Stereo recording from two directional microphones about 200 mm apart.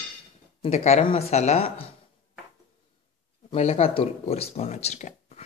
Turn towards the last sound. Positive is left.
turn(degrees=35)  # may be behind; listen again after turning